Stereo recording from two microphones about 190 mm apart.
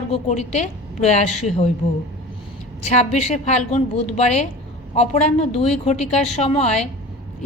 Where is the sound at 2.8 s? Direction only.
35° left (ahead or behind).